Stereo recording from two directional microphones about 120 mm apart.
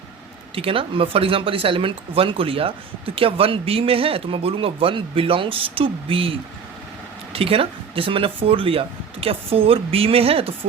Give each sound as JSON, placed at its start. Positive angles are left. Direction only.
{"t": 0.5, "sound": "speech", "side_deg": -50}
{"t": 7.3, "sound": "speech", "side_deg": -50}